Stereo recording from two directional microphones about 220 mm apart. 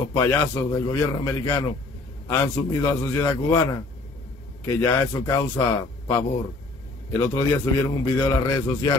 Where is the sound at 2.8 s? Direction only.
10° left (ahead or behind).